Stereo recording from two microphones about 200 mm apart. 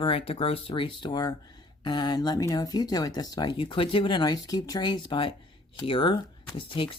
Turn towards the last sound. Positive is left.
turn(degrees=25)  # may be behind; listen again after turning